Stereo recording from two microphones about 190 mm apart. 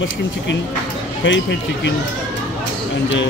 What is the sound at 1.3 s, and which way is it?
Speech, 70° left (ahead or behind).